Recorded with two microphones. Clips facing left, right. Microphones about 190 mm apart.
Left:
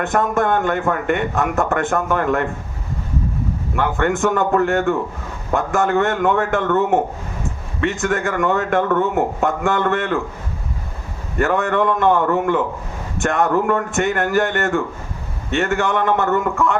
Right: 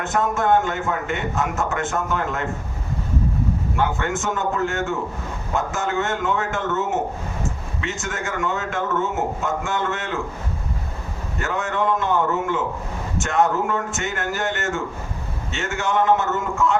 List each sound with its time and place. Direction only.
0.0 s a man's voice: 55° left (ahead or behind)
3.8 s a man's voice: 55° left (ahead or behind)
11.3 s a man's voice: 55° left (ahead or behind)